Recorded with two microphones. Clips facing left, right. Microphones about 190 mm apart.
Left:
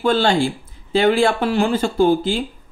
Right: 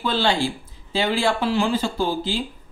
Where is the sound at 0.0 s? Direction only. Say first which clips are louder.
Left 5 dB; 50° left (ahead or behind).